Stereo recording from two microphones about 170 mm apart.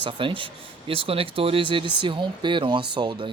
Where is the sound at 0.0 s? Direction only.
30° right (ahead or behind).